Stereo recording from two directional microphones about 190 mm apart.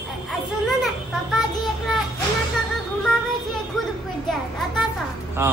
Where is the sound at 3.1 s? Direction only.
5° left (ahead or behind).